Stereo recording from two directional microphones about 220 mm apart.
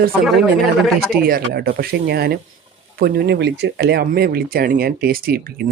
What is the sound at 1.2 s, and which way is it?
Speech, 45° right (ahead or behind).